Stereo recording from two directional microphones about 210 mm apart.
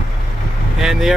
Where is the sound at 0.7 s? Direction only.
Centre (ahead or behind).